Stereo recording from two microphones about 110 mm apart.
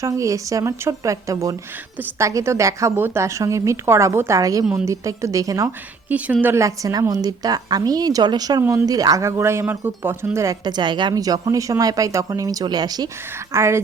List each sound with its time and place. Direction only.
0.0 s a woman's voice: 30° right (ahead or behind)
4.6 s a woman's voice: 5° right (ahead or behind)
4.9 s a woman's voice: 30° right (ahead or behind)
6.1 s a woman's voice: 15° right (ahead or behind)
10.3 s a woman's voice: 30° right (ahead or behind)
13.5 s a woman's voice: 25° right (ahead or behind)